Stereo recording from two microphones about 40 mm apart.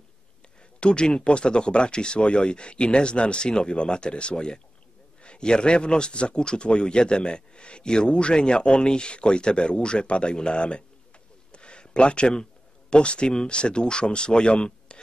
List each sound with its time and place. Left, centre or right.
0.7 s speech: left
11.5 s a sound: left
12.9 s speech: left